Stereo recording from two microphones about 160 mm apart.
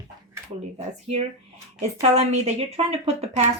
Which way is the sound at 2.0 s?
40° right (ahead or behind).